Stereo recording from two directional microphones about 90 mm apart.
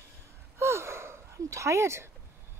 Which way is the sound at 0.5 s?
30° right (ahead or behind).